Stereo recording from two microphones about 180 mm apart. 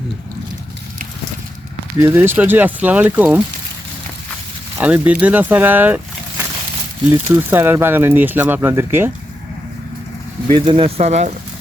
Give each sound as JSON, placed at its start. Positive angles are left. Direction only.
{"t": 2.0, "sound": "speech", "side_deg": -15}
{"t": 4.8, "sound": "speech", "side_deg": -10}
{"t": 7.1, "sound": "speech", "side_deg": -10}
{"t": 10.5, "sound": "speech", "side_deg": -30}